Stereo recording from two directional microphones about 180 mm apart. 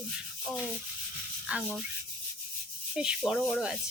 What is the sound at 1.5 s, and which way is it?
Speech, 5° right (ahead or behind).